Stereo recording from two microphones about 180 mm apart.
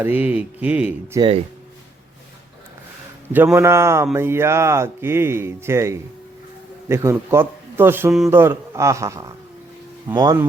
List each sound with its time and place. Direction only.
0.0 s speech: 10° right (ahead or behind)
3.3 s speech: 15° right (ahead or behind)